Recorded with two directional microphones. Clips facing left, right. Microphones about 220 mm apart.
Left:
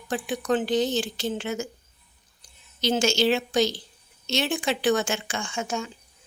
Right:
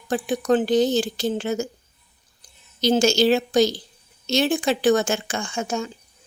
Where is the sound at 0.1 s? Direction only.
40° right (ahead or behind).